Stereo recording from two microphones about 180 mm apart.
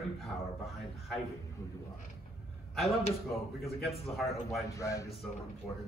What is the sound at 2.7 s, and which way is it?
A man's voice, centre (ahead or behind).